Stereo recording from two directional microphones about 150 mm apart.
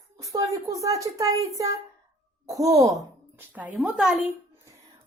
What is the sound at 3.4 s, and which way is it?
Speech, 10° right (ahead or behind).